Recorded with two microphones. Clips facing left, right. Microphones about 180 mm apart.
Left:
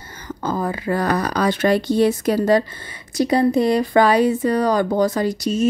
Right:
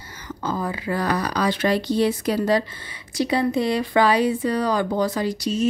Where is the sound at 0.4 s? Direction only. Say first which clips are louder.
Left 3 dB; 45° left (ahead or behind).